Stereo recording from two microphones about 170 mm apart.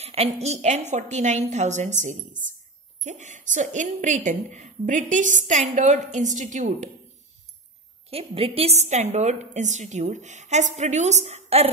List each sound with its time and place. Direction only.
0.0 s a woman's voice: 40° right (ahead or behind)
8.1 s a woman's voice: 35° right (ahead or behind)